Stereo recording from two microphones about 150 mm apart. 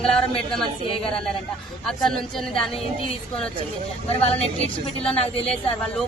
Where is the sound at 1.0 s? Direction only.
5° left (ahead or behind).